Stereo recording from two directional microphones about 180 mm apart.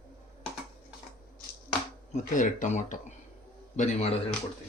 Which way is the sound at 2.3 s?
45° left (ahead or behind).